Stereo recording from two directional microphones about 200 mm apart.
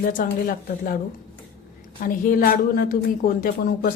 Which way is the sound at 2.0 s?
45° left (ahead or behind).